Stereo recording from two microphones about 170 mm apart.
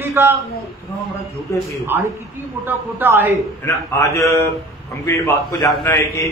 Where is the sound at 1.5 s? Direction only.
15° left (ahead or behind).